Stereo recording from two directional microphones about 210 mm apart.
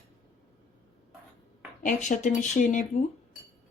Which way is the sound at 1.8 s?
35° left (ahead or behind).